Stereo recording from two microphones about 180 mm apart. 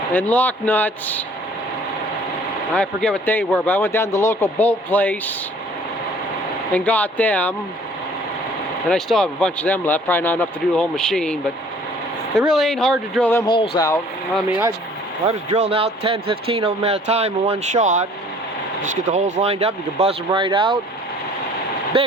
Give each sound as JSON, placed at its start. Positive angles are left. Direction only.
{"t": 0.1, "sound": "speech", "side_deg": 10}
{"t": 2.7, "sound": "speech", "side_deg": 5}
{"t": 6.7, "sound": "speech", "side_deg": 10}
{"t": 8.9, "sound": "speech", "side_deg": 0}
{"t": 12.4, "sound": "speech", "side_deg": 0}
{"t": 13.4, "sound": "speech", "side_deg": 25}
{"t": 15.3, "sound": "speech", "side_deg": -35}
{"t": 21.9, "sound": "speech", "side_deg": -30}